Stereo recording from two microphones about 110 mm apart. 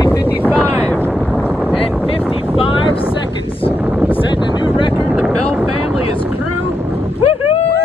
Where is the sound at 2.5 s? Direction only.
55° left (ahead or behind).